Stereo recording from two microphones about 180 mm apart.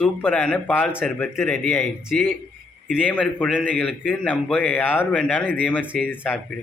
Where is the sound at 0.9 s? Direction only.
5° right (ahead or behind).